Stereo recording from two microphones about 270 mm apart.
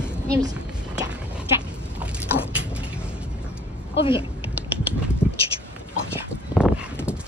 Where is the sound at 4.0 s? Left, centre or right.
Centre.